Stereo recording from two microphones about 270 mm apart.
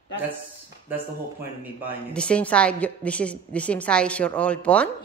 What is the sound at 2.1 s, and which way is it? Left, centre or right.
A woman's voice, centre.